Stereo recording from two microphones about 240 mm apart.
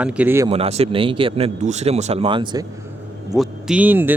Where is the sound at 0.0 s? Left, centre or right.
Centre.